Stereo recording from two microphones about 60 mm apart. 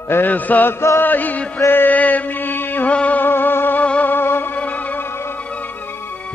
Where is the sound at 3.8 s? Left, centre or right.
Left.